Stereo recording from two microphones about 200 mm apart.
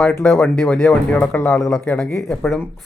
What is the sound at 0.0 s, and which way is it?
Speech, 5° left (ahead or behind).